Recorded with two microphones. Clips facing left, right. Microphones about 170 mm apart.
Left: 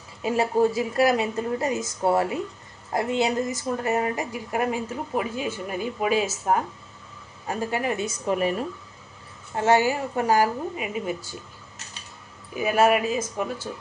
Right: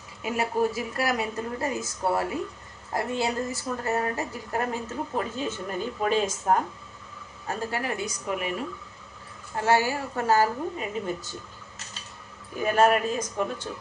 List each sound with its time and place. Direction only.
0.2 s speech: 25° left (ahead or behind)
2.9 s a woman's voice: 20° left (ahead or behind)
7.4 s speech: 20° left (ahead or behind); by 8.5 s 35° left (ahead or behind)
9.6 s a woman's voice: 20° left (ahead or behind)
12.5 s a woman's voice: 10° left (ahead or behind)